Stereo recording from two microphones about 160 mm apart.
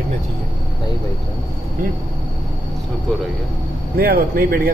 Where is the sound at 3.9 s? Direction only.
75° right (ahead or behind).